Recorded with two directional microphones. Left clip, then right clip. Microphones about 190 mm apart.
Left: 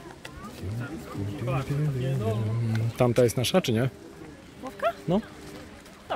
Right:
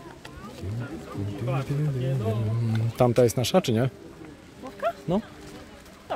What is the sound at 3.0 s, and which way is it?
Speech, 10° right (ahead or behind).